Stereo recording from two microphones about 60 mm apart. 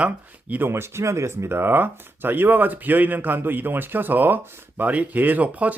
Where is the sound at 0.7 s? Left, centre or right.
Right.